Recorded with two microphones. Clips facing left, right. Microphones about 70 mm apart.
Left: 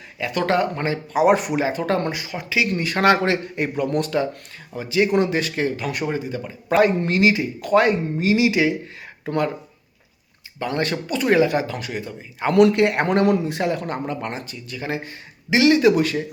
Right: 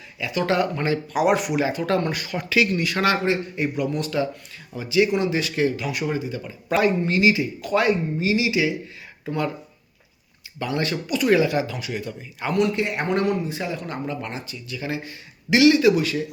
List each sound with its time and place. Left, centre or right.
0.2 s speech: left
2.1 s speech: left
3.5 s speech: left
7.0 s a man's voice: left
7.3 s speech: left
10.6 s speech: left
11.9 s speech: left
12.5 s a man's voice: left
13.2 s a man's voice: left
13.9 s speech: left
15.4 s speech: left